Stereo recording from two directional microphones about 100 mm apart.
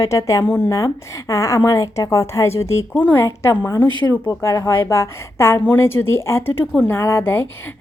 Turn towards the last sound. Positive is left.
turn(degrees=25)  # may be behind; listen again after turning